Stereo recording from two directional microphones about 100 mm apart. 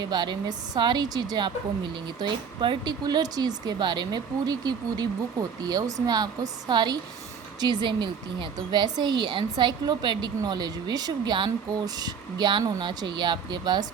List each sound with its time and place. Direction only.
0.0 s a woman's voice: 45° right (ahead or behind)